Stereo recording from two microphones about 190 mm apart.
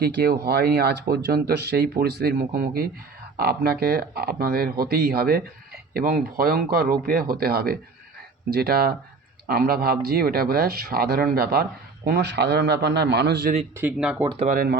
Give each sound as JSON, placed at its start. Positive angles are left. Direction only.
{"t": 0.0, "sound": "speech", "side_deg": -55}
{"t": 13.7, "sound": "speech", "side_deg": -10}
{"t": 14.3, "sound": "speech", "side_deg": -35}
{"t": 14.5, "sound": "speech", "side_deg": -50}